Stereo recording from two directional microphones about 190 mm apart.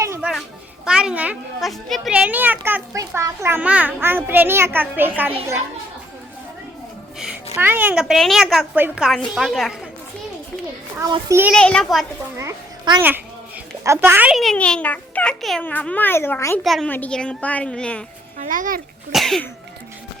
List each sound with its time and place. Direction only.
0.0 s a sound: 15° right (ahead or behind)
0.9 s speech: 5° right (ahead or behind)
7.5 s a woman's voice: 10° right (ahead or behind)
11.0 s speech: 20° right (ahead or behind)
11.5 s a woman's voice: 5° left (ahead or behind)
12.4 s a child's voice: 20° right (ahead or behind); by 18.0 s 5° left (ahead or behind)
18.3 s speech: 45° right (ahead or behind)
19.1 s a woman's voice: centre (ahead or behind)